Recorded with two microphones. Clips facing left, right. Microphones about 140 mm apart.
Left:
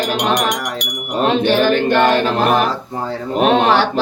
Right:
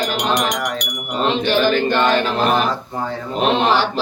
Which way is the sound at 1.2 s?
55° left (ahead or behind).